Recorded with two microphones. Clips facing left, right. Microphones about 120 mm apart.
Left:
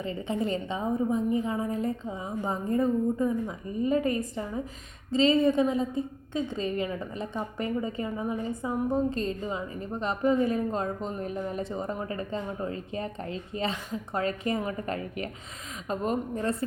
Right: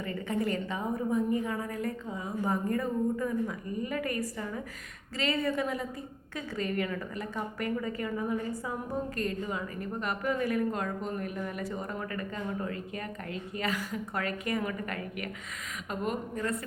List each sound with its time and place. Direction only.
0.0 s a woman's voice: 20° left (ahead or behind)